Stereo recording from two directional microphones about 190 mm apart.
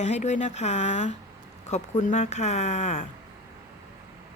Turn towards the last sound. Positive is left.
turn(degrees=35)  # may be behind; listen again after turning